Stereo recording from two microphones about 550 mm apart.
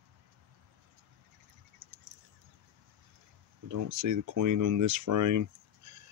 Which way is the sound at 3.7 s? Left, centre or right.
Right.